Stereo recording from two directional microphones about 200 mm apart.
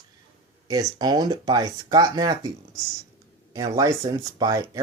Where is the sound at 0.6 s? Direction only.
20° right (ahead or behind).